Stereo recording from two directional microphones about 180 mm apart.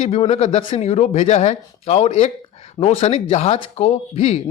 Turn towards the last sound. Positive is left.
turn(degrees=35)  # may be behind; listen again after turning